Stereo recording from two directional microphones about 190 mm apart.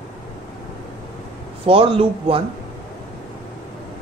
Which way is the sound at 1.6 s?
30° right (ahead or behind).